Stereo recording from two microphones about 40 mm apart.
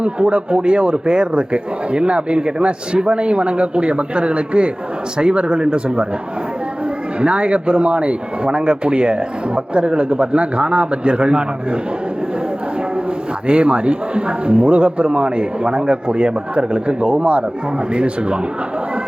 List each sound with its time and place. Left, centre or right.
0.0 s a man's voice: right
7.2 s a man's voice: right
13.5 s a man's voice: right